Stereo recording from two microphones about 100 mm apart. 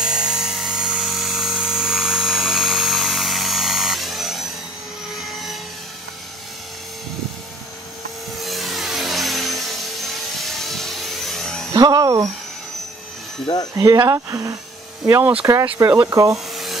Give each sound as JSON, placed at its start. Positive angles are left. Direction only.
{"t": 0.0, "sound": "helicopter", "side_deg": -5}
{"t": 8.4, "sound": "a sound", "side_deg": 0}
{"t": 10.3, "sound": "vehicle", "side_deg": 0}
{"t": 11.7, "sound": "a sound", "side_deg": -40}
{"t": 13.5, "sound": "speech", "side_deg": 35}
{"t": 13.9, "sound": "speech", "side_deg": -35}